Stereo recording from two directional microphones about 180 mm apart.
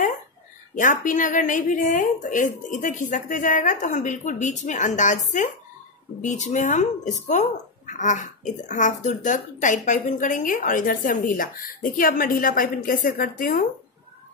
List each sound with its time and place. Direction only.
0.7 s speech: 45° left (ahead or behind)